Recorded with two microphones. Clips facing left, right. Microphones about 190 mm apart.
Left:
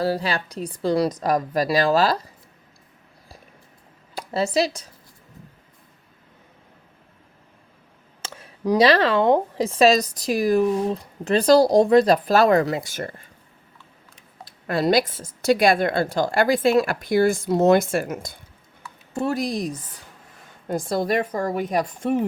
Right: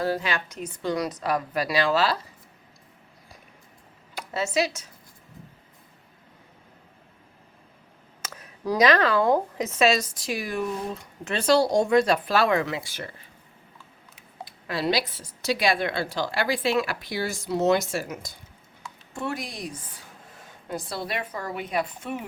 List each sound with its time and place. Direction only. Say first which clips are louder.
0.0 s speech: left 3 dB; 35° left (ahead or behind)
4.1 s speech: left 4 dB; 35° left (ahead or behind)
8.2 s a sound: left 5 dB; 30° left (ahead or behind)
8.8 s speech: left 2 dB; 30° left (ahead or behind); by 13.2 s 45° left (ahead or behind)
14.7 s a woman's voice: left 6 dB; 50° left (ahead or behind)
19.1 s a woman's voice: left 8 dB; 40° left (ahead or behind)